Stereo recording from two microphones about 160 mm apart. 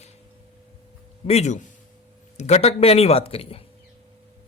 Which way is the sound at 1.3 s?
45° left (ahead or behind).